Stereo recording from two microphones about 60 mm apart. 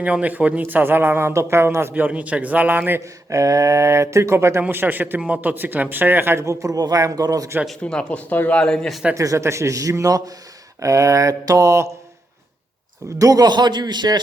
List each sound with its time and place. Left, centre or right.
0.0 s a man's voice: right
1.9 s a man's voice: right
3.0 s speech: right
4.7 s a man's voice: right
6.4 s a man's voice: right
7.9 s speech: centre
8.3 s speech: left
8.5 s speech: centre
9.1 s speech: right
10.8 s speech: right
13.1 s a man's voice: right